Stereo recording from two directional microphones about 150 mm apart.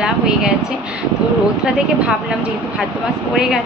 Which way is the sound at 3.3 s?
5° right (ahead or behind).